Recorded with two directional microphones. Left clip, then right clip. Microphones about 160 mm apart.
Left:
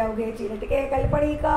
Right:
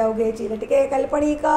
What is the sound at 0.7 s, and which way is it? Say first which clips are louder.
Speech: right 5 dB; 40° right (ahead or behind).